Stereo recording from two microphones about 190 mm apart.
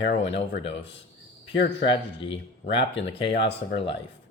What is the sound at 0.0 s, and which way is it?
Speech, 65° left (ahead or behind).